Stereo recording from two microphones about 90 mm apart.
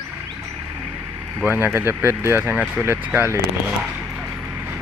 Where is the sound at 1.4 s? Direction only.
20° right (ahead or behind).